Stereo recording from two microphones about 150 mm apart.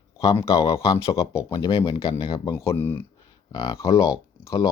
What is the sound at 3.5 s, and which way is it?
Speech, 30° left (ahead or behind).